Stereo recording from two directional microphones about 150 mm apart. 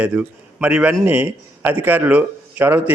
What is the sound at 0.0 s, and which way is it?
A man's voice, 10° right (ahead or behind).